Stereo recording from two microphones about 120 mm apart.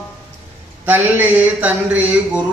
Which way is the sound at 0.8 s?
15° right (ahead or behind).